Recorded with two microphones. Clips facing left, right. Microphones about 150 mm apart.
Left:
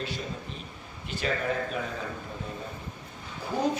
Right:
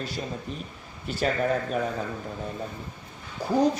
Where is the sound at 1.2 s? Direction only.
45° right (ahead or behind).